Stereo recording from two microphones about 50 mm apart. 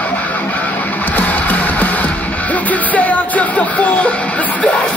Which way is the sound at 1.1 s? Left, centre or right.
Left.